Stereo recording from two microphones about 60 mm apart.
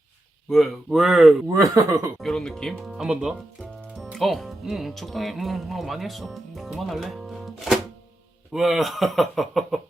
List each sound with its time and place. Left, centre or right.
0.5 s speech: centre
1.5 s speech: right
2.2 s speech: centre
2.9 s speech: centre
4.0 s speech: centre